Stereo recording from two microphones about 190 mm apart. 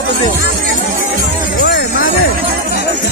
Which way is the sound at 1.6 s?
50° left (ahead or behind).